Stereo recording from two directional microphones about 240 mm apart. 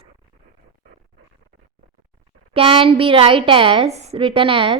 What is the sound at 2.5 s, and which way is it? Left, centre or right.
A woman's voice, right.